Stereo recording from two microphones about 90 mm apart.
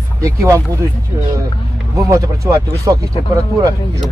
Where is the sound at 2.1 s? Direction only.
35° right (ahead or behind).